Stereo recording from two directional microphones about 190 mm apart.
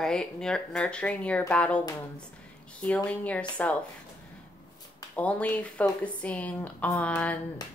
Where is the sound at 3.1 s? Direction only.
5° left (ahead or behind).